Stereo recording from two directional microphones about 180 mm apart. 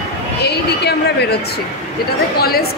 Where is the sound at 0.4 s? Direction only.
65° left (ahead or behind).